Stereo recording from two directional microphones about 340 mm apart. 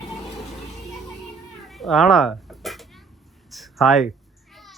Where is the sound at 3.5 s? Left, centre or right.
Centre.